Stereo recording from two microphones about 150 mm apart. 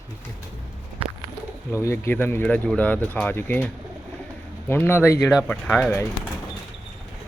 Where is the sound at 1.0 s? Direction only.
40° right (ahead or behind).